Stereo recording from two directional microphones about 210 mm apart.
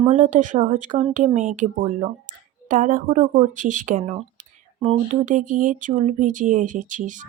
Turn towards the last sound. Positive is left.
turn(degrees=-35)  # may be behind; listen again after turning